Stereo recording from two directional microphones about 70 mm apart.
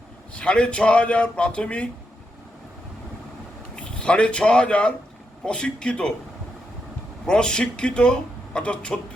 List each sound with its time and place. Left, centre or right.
0.3 s a man's voice: centre
3.8 s a man's voice: centre
7.3 s a man's voice: centre